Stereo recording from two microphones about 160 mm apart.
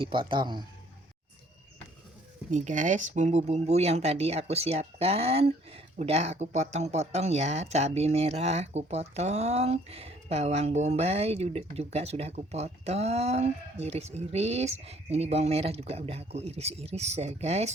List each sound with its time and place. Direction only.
0.0 s speech: 30° right (ahead or behind)
2.5 s speech: 50° right (ahead or behind)